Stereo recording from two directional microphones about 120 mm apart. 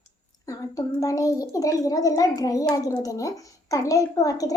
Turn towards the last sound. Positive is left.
turn(degrees=30)  # may be behind; listen again after turning